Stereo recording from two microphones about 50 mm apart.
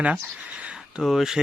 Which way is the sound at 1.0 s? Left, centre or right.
Centre.